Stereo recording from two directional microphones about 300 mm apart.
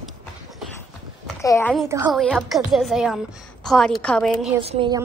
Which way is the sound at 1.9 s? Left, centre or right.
Centre.